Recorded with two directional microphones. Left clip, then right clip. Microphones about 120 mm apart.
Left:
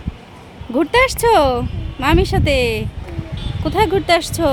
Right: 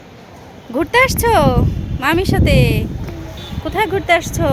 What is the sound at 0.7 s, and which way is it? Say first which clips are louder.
Speech: right 1 dB; 35° left (ahead or behind).